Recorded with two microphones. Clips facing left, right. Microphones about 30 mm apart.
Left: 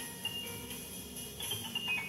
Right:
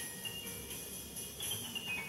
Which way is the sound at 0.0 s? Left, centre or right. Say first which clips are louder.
Left 4 dB; centre.